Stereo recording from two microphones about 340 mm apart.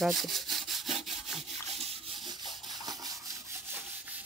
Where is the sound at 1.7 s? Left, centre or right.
Centre.